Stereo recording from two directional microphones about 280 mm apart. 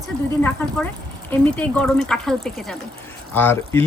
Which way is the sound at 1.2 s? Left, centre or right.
Centre.